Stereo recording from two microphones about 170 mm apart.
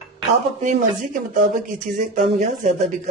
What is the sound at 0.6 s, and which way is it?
Speech, 50° right (ahead or behind).